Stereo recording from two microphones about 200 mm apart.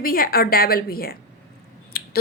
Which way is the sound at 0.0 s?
45° left (ahead or behind).